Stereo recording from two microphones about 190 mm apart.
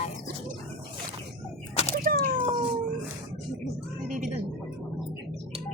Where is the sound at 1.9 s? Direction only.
50° right (ahead or behind).